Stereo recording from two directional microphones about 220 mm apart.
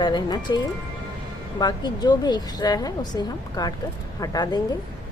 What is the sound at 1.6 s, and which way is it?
A woman's voice, 20° left (ahead or behind).